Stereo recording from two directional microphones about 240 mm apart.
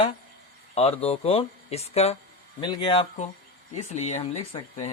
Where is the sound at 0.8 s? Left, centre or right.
Left.